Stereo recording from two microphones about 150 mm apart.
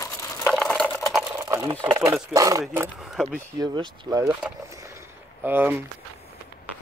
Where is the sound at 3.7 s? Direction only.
25° right (ahead or behind).